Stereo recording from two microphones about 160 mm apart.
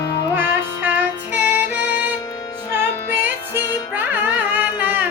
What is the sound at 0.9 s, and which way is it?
Music, 10° right (ahead or behind).